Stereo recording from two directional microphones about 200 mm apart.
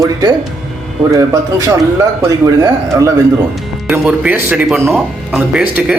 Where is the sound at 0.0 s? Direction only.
20° right (ahead or behind).